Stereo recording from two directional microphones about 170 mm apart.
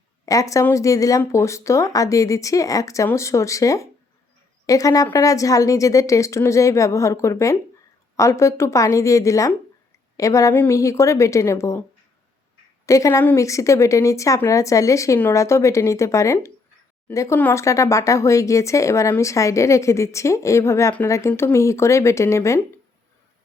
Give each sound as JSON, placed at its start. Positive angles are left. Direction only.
{"t": 0.3, "sound": "speech", "side_deg": 20}
{"t": 12.8, "sound": "speech", "side_deg": 20}